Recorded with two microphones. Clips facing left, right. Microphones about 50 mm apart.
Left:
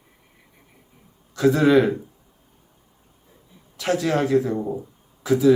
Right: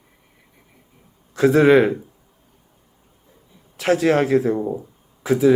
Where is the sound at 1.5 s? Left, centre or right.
Right.